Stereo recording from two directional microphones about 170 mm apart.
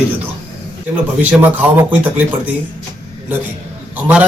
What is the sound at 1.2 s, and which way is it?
A man's voice, 10° right (ahead or behind).